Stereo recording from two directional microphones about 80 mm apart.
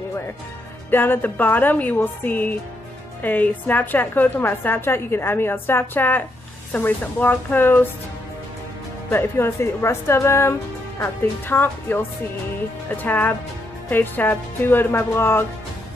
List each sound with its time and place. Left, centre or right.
0.8 s a woman's voice: left
9.1 s a woman's voice: left